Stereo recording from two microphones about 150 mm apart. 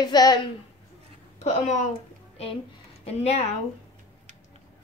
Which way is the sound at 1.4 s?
50° left (ahead or behind).